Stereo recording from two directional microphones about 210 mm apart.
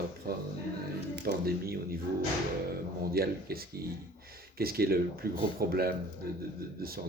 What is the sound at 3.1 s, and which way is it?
Speech, 45° right (ahead or behind).